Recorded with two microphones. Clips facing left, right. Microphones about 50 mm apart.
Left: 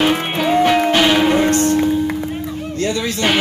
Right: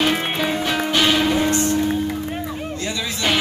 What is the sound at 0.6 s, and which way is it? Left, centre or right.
Music, left.